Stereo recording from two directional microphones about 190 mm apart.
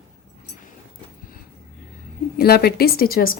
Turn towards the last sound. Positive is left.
turn(degrees=50)  # may be behind; listen again after turning